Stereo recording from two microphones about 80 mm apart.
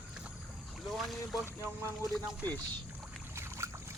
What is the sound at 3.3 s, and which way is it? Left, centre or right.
Boat, right.